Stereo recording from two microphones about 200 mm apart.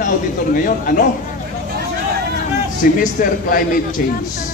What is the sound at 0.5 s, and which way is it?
Speech, 45° left (ahead or behind).